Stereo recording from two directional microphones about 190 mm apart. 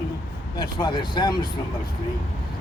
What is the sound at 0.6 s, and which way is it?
Speech, 25° left (ahead or behind).